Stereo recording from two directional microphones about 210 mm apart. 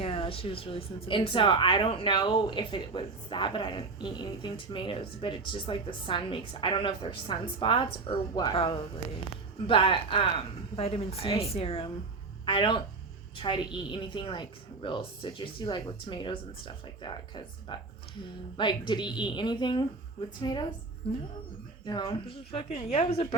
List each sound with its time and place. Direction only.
0.0 s a woman's voice: 25° left (ahead or behind)